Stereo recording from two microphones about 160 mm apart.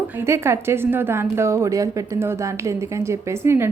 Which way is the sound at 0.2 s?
15° right (ahead or behind).